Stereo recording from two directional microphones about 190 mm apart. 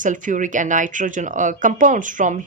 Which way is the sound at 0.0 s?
45° right (ahead or behind).